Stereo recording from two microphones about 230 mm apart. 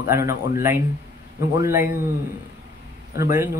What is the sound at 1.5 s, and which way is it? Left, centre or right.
Speech, centre.